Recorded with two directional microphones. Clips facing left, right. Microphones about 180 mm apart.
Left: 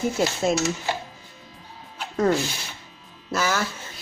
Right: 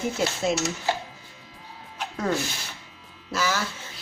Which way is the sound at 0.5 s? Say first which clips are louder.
Left 2 dB; 45° left (ahead or behind).